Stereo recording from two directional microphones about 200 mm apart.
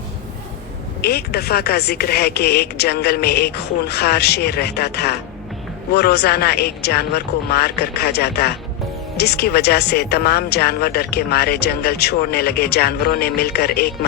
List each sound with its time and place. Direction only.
1.0 s speech: 50° left (ahead or behind)